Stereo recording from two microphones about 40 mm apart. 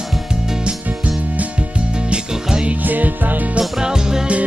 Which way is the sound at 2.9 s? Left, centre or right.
Right.